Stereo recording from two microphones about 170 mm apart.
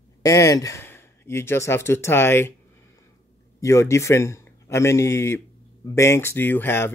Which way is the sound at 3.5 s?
15° left (ahead or behind).